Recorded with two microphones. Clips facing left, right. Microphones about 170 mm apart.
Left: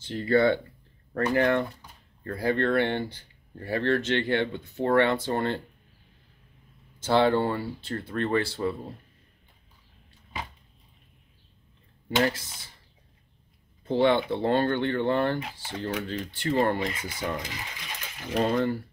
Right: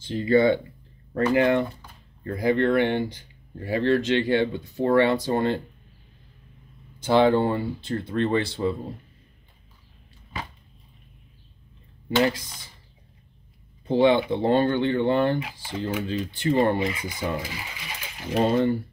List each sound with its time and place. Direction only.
0.1 s speech: 15° right (ahead or behind)
7.0 s speech: 15° right (ahead or behind)
12.3 s speech: 15° right (ahead or behind)
13.8 s speech: 15° right (ahead or behind)
18.4 s speech: 25° right (ahead or behind)